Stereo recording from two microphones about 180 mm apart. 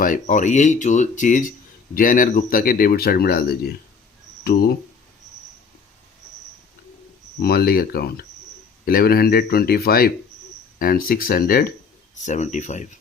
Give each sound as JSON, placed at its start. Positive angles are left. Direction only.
{"t": 0.0, "sound": "speech", "side_deg": 45}
{"t": 7.4, "sound": "speech", "side_deg": 60}
{"t": 12.2, "sound": "speech", "side_deg": 40}